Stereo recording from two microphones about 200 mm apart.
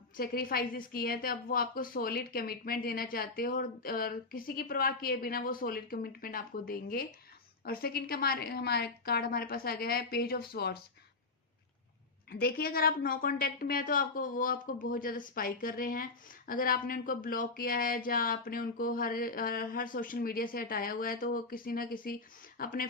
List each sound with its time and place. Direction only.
0.2 s a woman's voice: 50° left (ahead or behind)
12.3 s a woman's voice: 50° left (ahead or behind)